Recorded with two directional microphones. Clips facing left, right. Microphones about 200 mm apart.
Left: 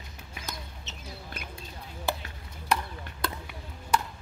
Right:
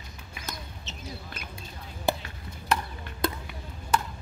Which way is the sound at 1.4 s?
55° left (ahead or behind).